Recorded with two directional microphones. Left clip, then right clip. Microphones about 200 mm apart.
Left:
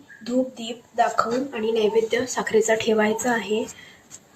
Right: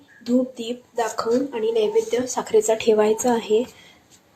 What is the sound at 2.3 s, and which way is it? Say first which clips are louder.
Speech: right 3 dB; 40° right (ahead or behind).